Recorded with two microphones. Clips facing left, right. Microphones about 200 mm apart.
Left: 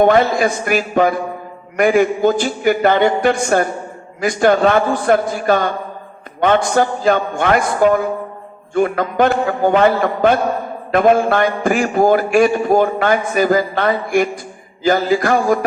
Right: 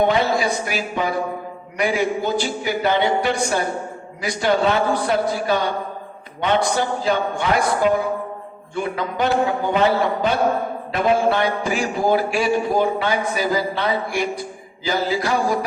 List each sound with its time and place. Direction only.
0.0 s a man's voice: 50° left (ahead or behind)